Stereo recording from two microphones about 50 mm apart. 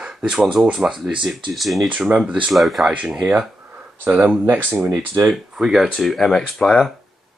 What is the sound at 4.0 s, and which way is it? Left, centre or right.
Speech, right.